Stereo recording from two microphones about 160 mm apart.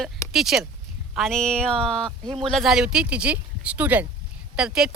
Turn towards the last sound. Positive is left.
turn(degrees=-5)  # may be behind; listen again after turning